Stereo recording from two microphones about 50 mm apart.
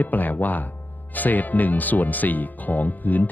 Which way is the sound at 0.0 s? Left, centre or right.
Left.